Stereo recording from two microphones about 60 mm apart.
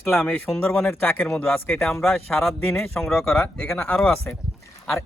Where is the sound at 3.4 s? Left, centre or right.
Centre.